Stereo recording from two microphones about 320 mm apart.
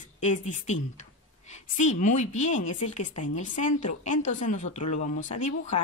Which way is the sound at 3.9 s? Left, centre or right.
Left.